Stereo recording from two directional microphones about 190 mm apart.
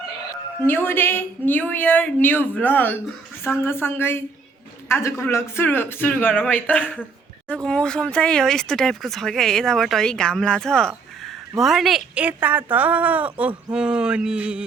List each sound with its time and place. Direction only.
0.6 s speech: 10° left (ahead or behind); by 14.6 s 5° right (ahead or behind)